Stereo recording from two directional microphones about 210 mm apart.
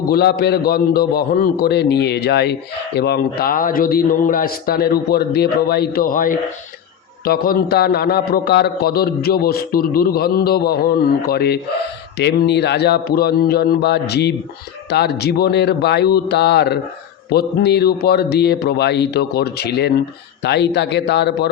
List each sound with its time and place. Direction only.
0.1 s a man's voice: 50° left (ahead or behind)